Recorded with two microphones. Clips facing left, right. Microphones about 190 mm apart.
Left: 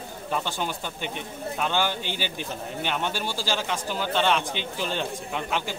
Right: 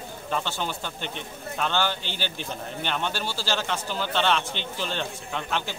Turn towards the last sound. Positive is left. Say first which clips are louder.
# left 1 dB
turn(degrees=10)  # may be behind; listen again after turning